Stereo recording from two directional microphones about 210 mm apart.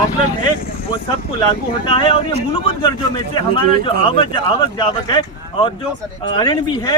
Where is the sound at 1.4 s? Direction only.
20° left (ahead or behind).